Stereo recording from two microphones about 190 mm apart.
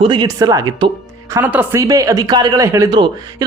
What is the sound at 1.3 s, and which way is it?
Speech, 10° right (ahead or behind).